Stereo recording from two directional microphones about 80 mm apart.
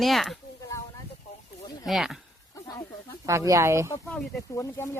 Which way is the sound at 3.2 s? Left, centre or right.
Right.